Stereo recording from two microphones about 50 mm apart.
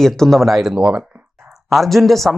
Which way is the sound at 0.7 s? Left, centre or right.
Centre.